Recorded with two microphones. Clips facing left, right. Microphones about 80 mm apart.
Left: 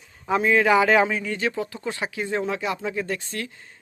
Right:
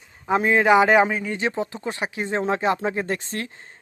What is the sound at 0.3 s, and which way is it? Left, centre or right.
Speech, right.